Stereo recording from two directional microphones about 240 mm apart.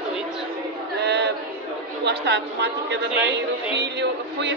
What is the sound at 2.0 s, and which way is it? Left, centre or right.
Speech, right.